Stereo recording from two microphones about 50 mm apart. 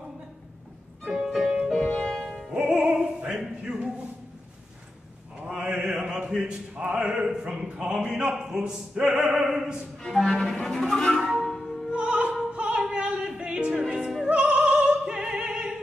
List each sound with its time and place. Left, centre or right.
1.3 s music: centre
1.9 s music: centre
2.5 s music: centre
5.6 s mantra: right
6.7 s a sound: right
10.0 s cello: centre
11.1 s music: centre
11.9 s opera: centre
12.5 s music: centre
14.2 s opera: right